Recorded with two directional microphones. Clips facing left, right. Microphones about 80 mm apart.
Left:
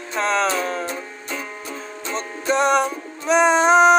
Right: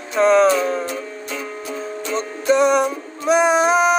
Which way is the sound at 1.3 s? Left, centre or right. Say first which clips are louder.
Right 1 dB; left.